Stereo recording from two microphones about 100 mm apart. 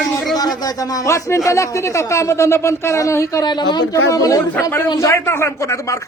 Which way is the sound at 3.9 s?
35° left (ahead or behind).